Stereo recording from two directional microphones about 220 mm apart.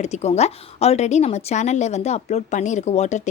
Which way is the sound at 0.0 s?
30° left (ahead or behind).